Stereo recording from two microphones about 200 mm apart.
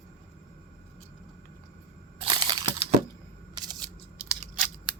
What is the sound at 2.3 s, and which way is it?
Crushing, 25° right (ahead or behind).